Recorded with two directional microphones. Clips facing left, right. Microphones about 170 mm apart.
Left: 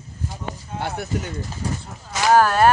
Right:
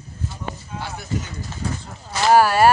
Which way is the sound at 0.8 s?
60° left (ahead or behind).